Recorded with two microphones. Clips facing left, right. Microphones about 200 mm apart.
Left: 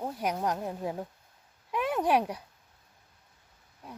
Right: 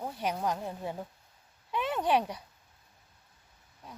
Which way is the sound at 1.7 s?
10° left (ahead or behind).